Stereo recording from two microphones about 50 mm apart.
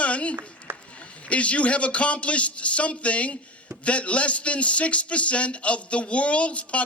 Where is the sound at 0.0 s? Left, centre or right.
Left.